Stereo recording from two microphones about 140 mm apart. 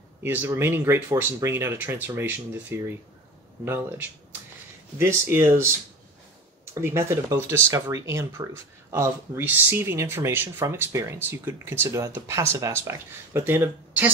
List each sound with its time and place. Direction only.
0.2 s speech: 15° right (ahead or behind)
4.9 s speech: 20° right (ahead or behind)